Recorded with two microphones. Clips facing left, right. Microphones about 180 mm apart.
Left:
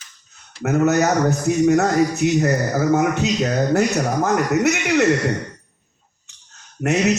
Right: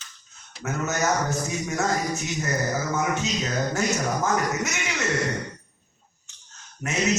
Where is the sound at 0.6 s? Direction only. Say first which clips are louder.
Left 10 dB; 65° left (ahead or behind).